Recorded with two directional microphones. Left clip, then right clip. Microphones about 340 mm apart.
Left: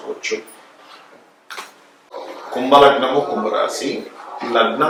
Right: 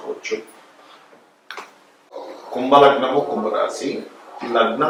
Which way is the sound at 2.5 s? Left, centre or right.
Right.